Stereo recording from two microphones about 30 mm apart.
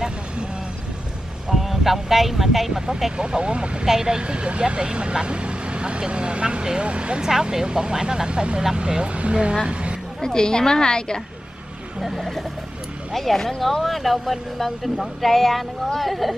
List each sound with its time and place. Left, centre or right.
1.5 s speech: centre
3.2 s speech: right
3.8 s speech: centre
4.2 s speech: right
7.2 s speech: centre
8.3 s speech: right
9.1 s a woman's voice: right
10.2 s a woman's voice: left
12.0 s speech: centre